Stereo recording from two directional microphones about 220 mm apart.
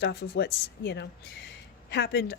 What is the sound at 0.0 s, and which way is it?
Speech, 50° left (ahead or behind).